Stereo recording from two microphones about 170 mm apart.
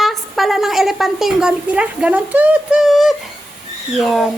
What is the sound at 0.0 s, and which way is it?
A woman's voice, centre (ahead or behind).